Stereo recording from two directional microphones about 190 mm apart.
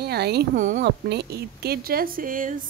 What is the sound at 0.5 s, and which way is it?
Speech, 40° right (ahead or behind).